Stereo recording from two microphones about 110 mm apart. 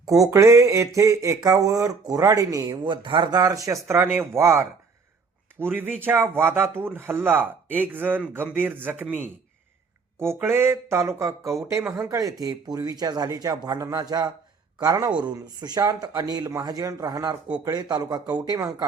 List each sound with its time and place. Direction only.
0.0 s a sound: 30° right (ahead or behind)
0.3 s speech: 25° right (ahead or behind)
3.8 s speech: 20° right (ahead or behind)
10.2 s speech: 25° right (ahead or behind); by 14.3 s 40° right (ahead or behind)
14.8 s speech: 30° right (ahead or behind)
15.1 s speech: 40° right (ahead or behind)